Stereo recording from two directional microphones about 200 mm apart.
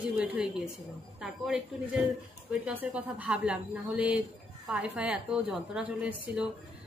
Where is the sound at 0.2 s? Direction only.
5° right (ahead or behind).